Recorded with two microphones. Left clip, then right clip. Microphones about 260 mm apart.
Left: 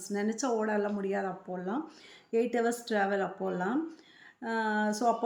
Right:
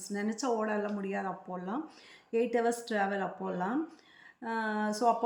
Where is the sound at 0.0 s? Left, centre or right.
Centre.